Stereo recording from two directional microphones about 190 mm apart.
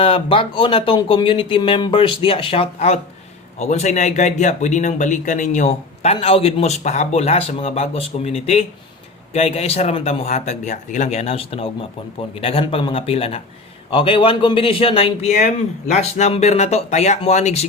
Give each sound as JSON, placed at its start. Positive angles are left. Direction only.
{"t": 0.0, "sound": "speech", "side_deg": 30}